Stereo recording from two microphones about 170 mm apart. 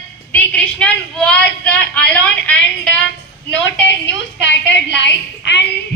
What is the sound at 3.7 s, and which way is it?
A woman's voice, 90° left.